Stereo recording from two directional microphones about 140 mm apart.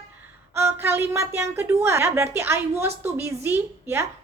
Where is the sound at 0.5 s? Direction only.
15° right (ahead or behind).